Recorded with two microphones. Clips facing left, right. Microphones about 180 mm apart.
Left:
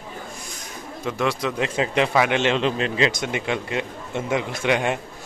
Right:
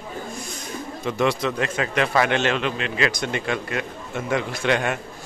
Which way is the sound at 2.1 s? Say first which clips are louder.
Left 1 dB; 10° left (ahead or behind).